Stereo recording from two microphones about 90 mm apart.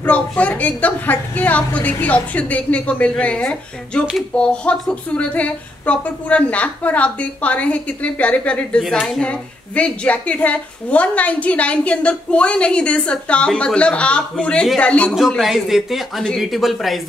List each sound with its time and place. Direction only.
0.0 s a woman's voice: 15° left (ahead or behind)
15.1 s speech: 5° right (ahead or behind)